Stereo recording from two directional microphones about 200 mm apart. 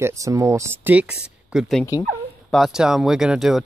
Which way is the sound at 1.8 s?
15° left (ahead or behind).